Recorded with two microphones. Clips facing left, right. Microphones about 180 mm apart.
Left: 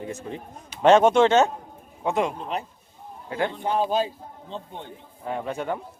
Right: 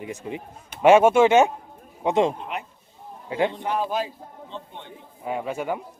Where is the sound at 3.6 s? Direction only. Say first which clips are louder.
Left 2 dB; 30° left (ahead or behind).